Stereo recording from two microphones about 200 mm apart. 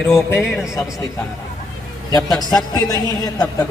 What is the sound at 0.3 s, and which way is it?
Speech, centre (ahead or behind).